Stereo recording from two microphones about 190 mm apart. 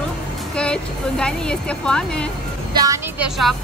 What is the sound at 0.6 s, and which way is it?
Speech, 5° left (ahead or behind).